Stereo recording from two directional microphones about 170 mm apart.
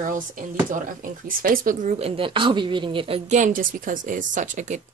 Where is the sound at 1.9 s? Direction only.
35° right (ahead or behind).